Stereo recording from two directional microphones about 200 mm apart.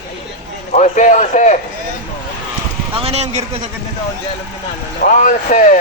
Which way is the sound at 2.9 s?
30° right (ahead or behind).